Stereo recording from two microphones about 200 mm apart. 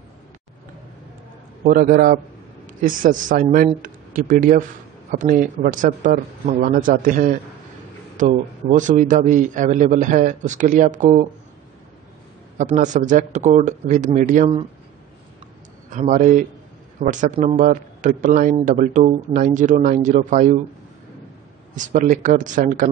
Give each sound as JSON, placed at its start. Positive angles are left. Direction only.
{"t": 1.6, "sound": "a man's voice", "side_deg": -45}
{"t": 12.5, "sound": "a man's voice", "side_deg": -35}
{"t": 15.9, "sound": "a man's voice", "side_deg": -40}
{"t": 21.7, "sound": "a man's voice", "side_deg": -40}